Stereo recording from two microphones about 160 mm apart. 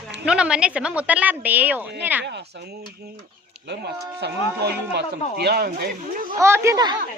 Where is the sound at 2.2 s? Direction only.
90° right.